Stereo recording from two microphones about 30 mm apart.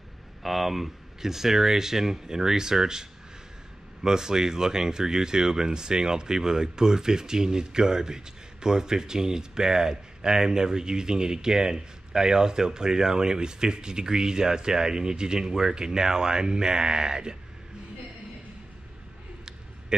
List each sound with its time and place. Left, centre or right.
0.4 s speech: centre; by 17.4 s right
19.9 s speech: right